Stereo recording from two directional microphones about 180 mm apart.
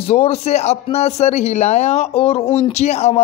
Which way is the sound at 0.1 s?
35° left (ahead or behind).